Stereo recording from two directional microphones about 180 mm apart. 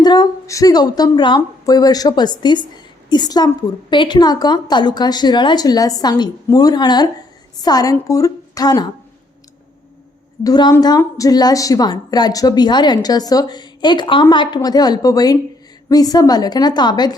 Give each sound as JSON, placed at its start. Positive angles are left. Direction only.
{"t": 0.0, "sound": "a woman's voice", "side_deg": 25}
{"t": 10.4, "sound": "a woman's voice", "side_deg": 20}